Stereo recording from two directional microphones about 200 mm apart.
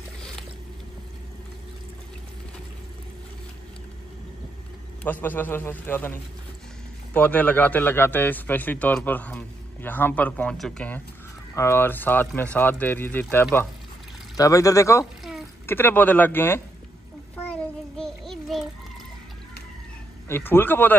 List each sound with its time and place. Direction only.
5.0 s speech: 10° left (ahead or behind)
7.2 s speech: 10° left (ahead or behind)
17.4 s child singing: 5° left (ahead or behind)
20.2 s speech: 10° left (ahead or behind)